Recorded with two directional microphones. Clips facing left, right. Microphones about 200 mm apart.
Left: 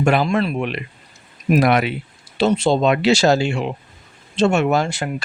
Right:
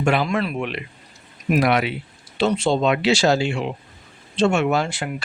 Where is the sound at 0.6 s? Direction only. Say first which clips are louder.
Left 3 dB; 50° left (ahead or behind).